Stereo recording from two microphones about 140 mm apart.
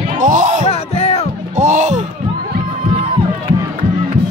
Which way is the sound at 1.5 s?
60° right (ahead or behind).